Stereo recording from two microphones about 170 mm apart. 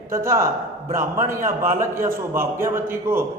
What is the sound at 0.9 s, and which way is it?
Speech, 50° right (ahead or behind).